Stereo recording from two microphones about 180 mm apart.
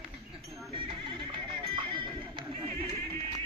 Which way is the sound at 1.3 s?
30° right (ahead or behind).